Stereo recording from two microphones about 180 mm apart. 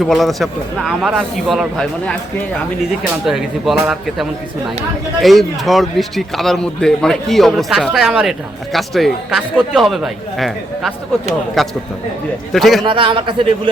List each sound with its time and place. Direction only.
0.0 s a man's voice: centre (ahead or behind)
3.2 s a man's voice: centre (ahead or behind)
12.8 s a man's voice: 25° right (ahead or behind)